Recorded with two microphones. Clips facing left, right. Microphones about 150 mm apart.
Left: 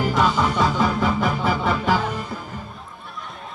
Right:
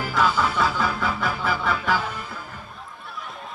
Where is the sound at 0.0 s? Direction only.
20° left (ahead or behind).